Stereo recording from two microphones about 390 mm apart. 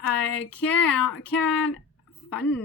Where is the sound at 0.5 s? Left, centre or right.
Centre.